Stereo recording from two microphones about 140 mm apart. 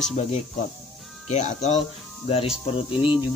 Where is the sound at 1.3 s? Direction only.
55° left (ahead or behind).